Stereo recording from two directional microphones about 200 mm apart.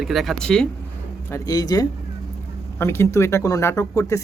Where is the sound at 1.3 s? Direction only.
15° left (ahead or behind).